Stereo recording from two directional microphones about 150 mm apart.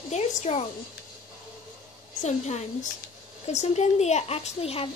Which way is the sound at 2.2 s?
50° left (ahead or behind).